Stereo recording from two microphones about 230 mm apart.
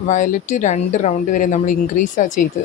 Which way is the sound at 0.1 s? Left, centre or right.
Left.